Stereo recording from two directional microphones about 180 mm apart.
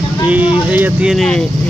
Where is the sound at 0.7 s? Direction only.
5° right (ahead or behind).